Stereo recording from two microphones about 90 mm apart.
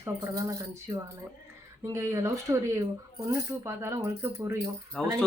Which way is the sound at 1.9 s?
35° right (ahead or behind).